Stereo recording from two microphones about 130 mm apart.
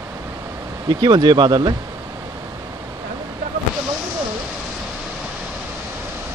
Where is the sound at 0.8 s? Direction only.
30° right (ahead or behind).